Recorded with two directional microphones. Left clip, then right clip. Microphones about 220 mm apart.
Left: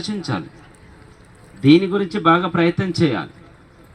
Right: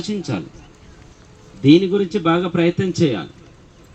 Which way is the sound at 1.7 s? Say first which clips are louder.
Right 1 dB; 30° left (ahead or behind).